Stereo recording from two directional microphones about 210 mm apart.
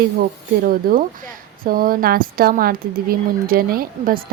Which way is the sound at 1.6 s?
45° right (ahead or behind).